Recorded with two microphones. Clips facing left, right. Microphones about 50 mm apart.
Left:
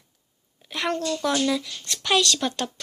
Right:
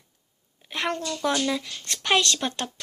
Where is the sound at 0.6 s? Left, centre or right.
Centre.